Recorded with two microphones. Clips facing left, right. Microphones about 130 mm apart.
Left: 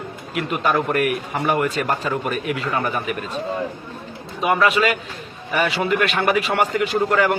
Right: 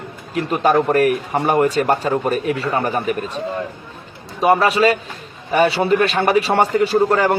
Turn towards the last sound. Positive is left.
turn(degrees=-35)  # may be behind; listen again after turning